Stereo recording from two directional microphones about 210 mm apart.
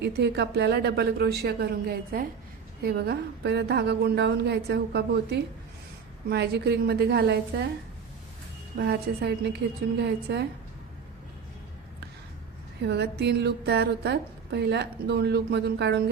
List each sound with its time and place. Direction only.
0.0 s a woman's voice: 55° right (ahead or behind)
8.8 s a woman's voice: 50° right (ahead or behind)
12.8 s a woman's voice: 50° right (ahead or behind)